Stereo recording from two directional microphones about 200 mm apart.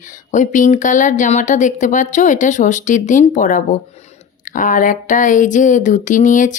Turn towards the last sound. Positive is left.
turn(degrees=40)  # may be behind; listen again after turning